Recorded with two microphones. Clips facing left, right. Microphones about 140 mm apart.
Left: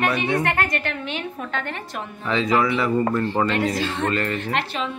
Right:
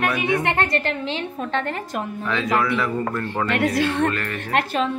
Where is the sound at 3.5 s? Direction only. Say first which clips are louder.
Right 3 dB; 65° right (ahead or behind); by 4.9 s 45° right (ahead or behind).